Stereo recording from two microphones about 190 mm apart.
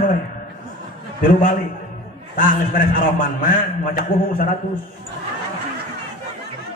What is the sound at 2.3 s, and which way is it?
A man's voice, 45° left (ahead or behind).